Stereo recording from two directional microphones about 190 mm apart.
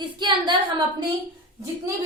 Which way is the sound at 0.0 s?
25° right (ahead or behind).